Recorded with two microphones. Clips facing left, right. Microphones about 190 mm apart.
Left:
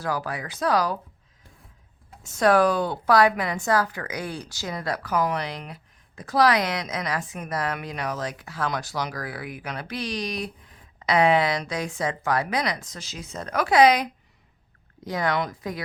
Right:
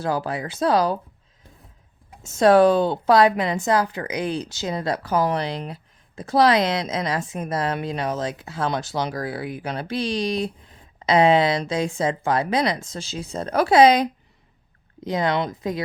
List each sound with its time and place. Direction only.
0.0 s speech: 25° right (ahead or behind)
2.2 s speech: 25° right (ahead or behind)